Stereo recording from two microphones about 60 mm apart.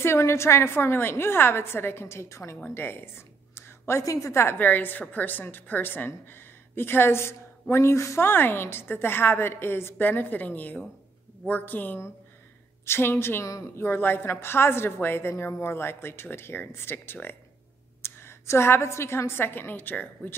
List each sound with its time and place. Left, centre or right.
0.0 s a woman's voice: left
2.7 s a sound: left
4.0 s a woman's voice: left
4.4 s a woman's voice: left
4.6 s speech: left
8.3 s speech: left
10.0 s a woman's voice: left
12.8 s speech: left
13.4 s a woman's voice: left
13.7 s a woman's voice: left